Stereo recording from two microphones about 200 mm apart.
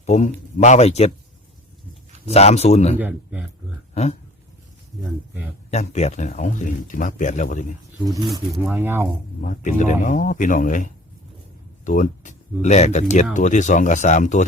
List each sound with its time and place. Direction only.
0.0 s speech: 35° left (ahead or behind)
2.2 s speech: 30° left (ahead or behind)
3.0 s speech: 10° right (ahead or behind)
3.9 s speech: 35° left (ahead or behind)
5.7 s speech: 35° left (ahead or behind)
8.0 s speech: 20° right (ahead or behind)
8.3 s speech: centre (ahead or behind)
8.7 s speech: 10° right (ahead or behind)
9.4 s speech: 40° left (ahead or behind)